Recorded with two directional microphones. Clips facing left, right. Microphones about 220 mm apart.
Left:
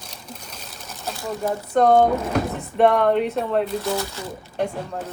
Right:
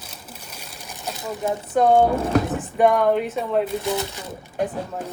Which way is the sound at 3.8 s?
15° right (ahead or behind).